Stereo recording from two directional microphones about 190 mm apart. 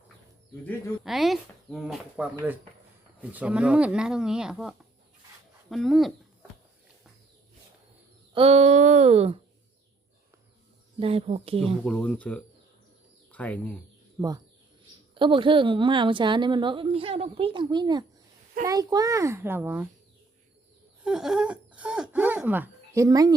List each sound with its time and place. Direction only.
0.6 s speech: centre (ahead or behind)
5.7 s speech: centre (ahead or behind)
8.4 s speech: 35° right (ahead or behind)
11.0 s speech: 35° right (ahead or behind)
11.6 s speech: centre (ahead or behind)
14.2 s a woman's voice: 20° right (ahead or behind)
21.0 s speech: centre (ahead or behind); by 23.3 s 20° right (ahead or behind)